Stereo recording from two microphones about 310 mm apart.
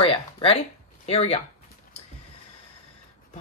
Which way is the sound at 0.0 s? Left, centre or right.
Centre.